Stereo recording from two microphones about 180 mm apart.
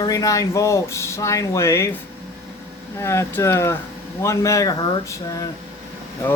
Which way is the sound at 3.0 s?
15° left (ahead or behind).